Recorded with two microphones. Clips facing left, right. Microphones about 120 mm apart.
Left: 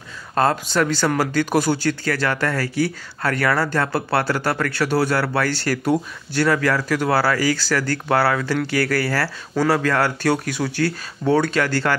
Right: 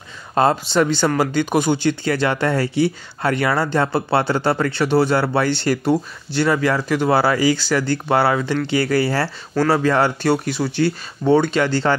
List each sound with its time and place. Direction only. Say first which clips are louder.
0.3 s speech: right 2 dB; 15° right (ahead or behind)
1.9 s speech: right 3 dB; 20° right (ahead or behind)